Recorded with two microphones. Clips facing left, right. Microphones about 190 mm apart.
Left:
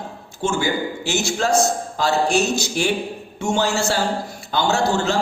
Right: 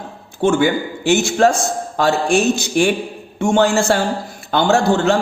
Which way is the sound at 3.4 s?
55° right (ahead or behind).